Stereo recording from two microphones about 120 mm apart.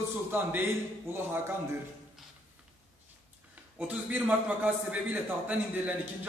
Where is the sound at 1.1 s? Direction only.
20° right (ahead or behind).